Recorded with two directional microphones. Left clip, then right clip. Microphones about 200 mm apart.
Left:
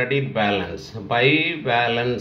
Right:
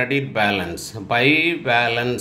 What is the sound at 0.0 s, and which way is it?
Speech, 35° right (ahead or behind).